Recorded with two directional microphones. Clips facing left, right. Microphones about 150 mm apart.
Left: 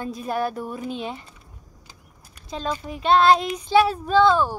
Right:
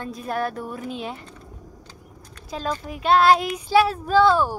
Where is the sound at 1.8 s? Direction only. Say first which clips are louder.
Right 6 dB; 10° left (ahead or behind).